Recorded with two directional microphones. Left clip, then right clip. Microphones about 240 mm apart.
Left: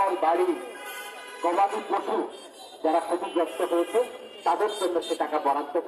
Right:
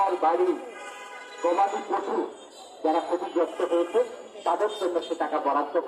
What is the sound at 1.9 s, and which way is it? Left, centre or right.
A man's voice, left.